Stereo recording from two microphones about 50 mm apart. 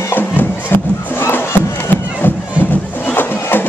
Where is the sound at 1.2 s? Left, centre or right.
Left.